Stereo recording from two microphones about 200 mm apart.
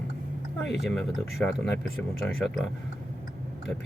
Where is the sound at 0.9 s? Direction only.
Centre (ahead or behind).